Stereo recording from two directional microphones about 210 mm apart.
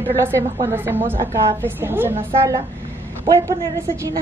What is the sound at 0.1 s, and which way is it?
A woman's voice, 10° right (ahead or behind).